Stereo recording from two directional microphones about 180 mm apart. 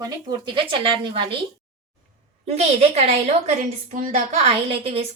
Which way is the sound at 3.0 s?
35° right (ahead or behind).